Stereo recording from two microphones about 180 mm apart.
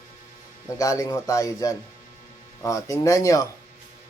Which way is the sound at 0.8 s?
20° left (ahead or behind).